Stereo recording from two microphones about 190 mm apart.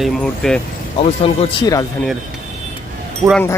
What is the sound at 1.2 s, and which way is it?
Speech, 20° left (ahead or behind).